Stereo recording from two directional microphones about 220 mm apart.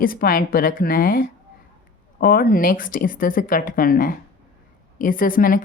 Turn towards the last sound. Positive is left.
turn(degrees=40)  # may be behind; listen again after turning